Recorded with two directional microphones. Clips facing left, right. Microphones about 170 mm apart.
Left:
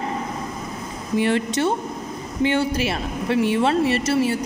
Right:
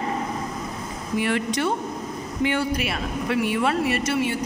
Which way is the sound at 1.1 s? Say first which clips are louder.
Left 3 dB; 25° left (ahead or behind).